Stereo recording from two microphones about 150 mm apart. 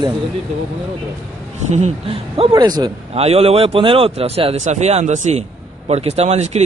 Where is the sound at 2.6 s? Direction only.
25° right (ahead or behind).